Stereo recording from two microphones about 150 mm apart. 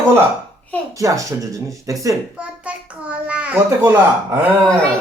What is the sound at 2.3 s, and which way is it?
A child's voice, 10° right (ahead or behind).